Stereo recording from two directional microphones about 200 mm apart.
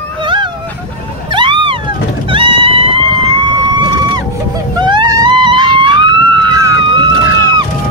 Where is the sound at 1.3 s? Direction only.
25° right (ahead or behind).